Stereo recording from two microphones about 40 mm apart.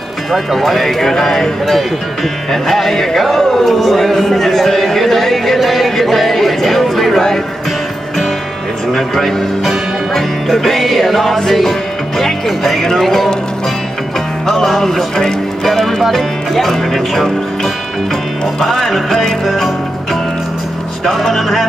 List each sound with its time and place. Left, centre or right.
0.3 s a man's voice: centre
2.5 s music: centre
3.3 s a man's voice: centre
8.9 s a man's voice: centre
12.2 s music: centre
14.4 s a man's voice: centre
18.4 s music: centre
21.0 s a man's voice: centre